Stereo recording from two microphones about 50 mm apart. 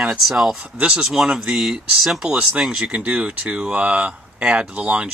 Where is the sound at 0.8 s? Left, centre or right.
Right.